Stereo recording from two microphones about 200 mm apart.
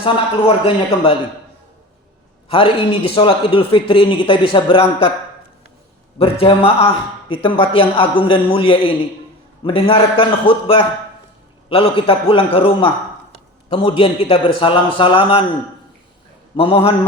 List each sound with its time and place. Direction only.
0.0 s a man's voice: 30° left (ahead or behind)
2.5 s a man's voice: 30° left (ahead or behind)
6.4 s a man's voice: 30° left (ahead or behind)
16.6 s a man's voice: 30° left (ahead or behind)